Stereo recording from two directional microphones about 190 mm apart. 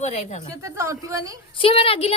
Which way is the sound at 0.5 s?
15° right (ahead or behind).